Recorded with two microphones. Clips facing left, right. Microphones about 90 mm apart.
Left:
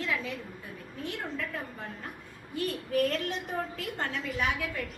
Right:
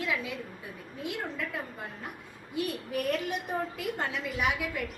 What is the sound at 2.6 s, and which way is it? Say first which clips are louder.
A woman's voice: left 3 dB; 15° right (ahead or behind).